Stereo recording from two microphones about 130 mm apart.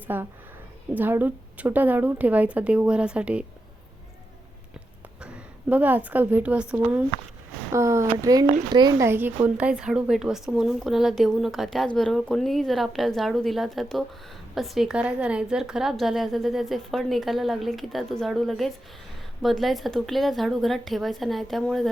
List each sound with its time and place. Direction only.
0.1 s a woman's voice: 15° right (ahead or behind)
5.2 s a woman's voice: 10° right (ahead or behind)
7.7 s speech: 20° right (ahead or behind)
9.0 s a woman's voice: 15° right (ahead or behind); by 21.8 s centre (ahead or behind)